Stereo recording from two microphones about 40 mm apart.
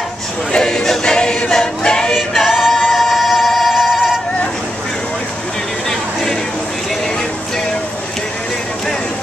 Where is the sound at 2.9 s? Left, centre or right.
Centre.